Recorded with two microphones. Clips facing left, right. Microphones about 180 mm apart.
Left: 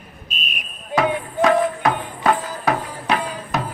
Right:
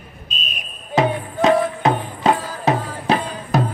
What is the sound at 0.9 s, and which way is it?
Music, 20° right (ahead or behind).